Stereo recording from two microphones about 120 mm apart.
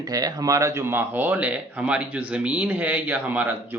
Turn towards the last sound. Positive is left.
turn(degrees=-15)  # may be behind; listen again after turning